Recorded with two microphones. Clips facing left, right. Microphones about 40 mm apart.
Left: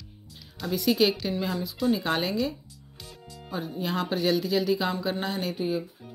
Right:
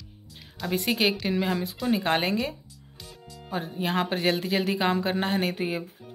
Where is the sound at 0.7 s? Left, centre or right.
Right.